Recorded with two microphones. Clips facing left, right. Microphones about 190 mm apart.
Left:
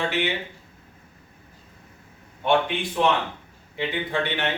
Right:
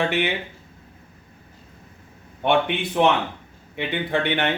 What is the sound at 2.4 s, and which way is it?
A man's voice, 65° right (ahead or behind).